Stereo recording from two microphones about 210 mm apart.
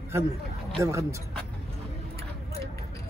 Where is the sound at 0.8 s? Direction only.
15° right (ahead or behind).